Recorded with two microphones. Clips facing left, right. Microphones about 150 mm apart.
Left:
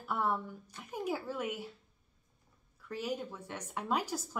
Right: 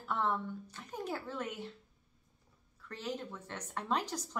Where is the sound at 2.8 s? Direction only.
10° left (ahead or behind).